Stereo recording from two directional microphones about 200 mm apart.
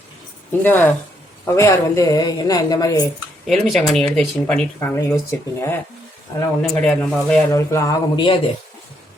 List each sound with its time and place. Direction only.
0.6 s a woman's voice: 10° left (ahead or behind)
3.4 s a woman's voice: centre (ahead or behind)
6.6 s speech: centre (ahead or behind)
7.5 s a woman's voice: 15° left (ahead or behind)